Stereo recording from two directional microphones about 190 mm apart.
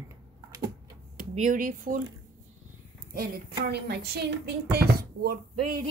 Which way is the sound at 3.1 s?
55° right (ahead or behind).